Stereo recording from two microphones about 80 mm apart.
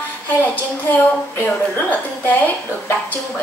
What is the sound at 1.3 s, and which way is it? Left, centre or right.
Speech, left.